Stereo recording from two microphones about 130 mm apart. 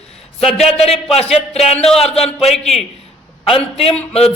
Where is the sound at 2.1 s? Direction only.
55° left (ahead or behind).